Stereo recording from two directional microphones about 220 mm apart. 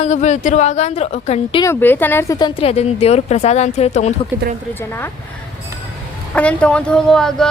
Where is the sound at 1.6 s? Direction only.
10° left (ahead or behind); by 4.1 s 30° left (ahead or behind).